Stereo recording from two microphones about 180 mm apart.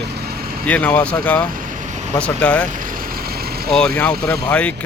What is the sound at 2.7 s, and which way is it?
Vehicle, 50° right (ahead or behind).